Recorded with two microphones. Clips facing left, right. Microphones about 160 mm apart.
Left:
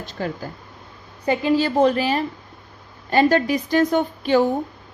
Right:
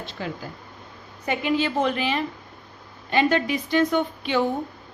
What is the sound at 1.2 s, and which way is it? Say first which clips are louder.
A woman's voice: left 5 dB; 30° left (ahead or behind).